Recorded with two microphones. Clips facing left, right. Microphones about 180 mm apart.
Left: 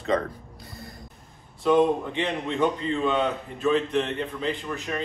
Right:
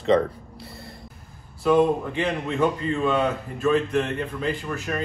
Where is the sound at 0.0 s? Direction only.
30° right (ahead or behind).